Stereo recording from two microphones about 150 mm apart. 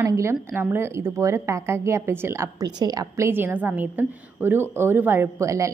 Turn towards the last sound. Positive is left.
turn(degrees=-20)  # may be behind; listen again after turning